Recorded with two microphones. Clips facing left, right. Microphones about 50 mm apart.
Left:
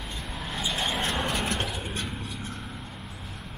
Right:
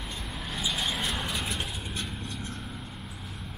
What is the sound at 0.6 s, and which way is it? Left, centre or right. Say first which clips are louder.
Vehicle: left 2 dB; centre.